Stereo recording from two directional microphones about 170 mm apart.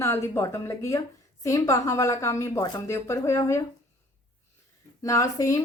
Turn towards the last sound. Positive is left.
turn(degrees=20)  # may be behind; listen again after turning